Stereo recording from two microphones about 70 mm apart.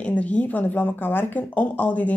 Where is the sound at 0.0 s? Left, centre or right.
Centre.